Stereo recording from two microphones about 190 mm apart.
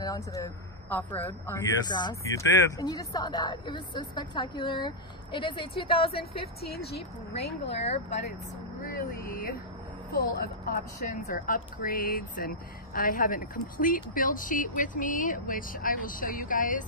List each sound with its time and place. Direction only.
0.0 s speech: 20° left (ahead or behind)
1.9 s speech: 20° left (ahead or behind)
7.3 s speech: 60° left (ahead or behind)
7.8 s speech: 35° left (ahead or behind)
8.9 s speech: 50° left (ahead or behind)